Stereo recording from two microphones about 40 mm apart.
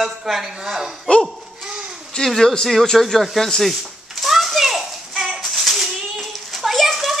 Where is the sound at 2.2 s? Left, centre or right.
Centre.